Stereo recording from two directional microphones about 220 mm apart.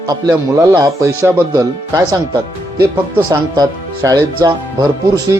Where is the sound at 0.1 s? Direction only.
15° right (ahead or behind).